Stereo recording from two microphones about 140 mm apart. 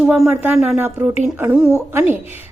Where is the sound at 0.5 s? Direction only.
10° right (ahead or behind).